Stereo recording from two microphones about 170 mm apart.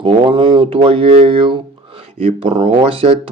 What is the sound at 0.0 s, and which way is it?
Speech, 30° right (ahead or behind).